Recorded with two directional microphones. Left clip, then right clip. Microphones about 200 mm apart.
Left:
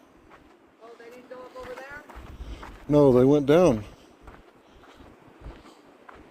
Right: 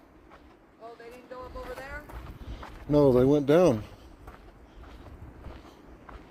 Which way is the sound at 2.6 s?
30° left (ahead or behind).